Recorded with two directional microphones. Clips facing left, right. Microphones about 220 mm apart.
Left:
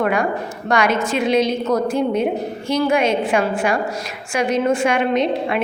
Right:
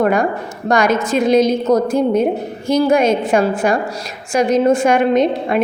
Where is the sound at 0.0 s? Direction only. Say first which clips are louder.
Right 4 dB; 45° right (ahead or behind).